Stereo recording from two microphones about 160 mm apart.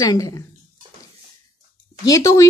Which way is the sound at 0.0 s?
20° left (ahead or behind).